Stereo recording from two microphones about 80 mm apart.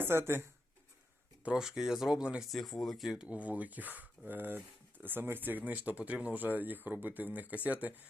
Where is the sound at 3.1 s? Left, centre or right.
Centre.